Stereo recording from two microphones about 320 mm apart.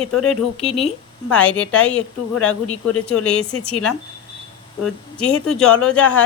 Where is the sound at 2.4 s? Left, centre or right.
Left.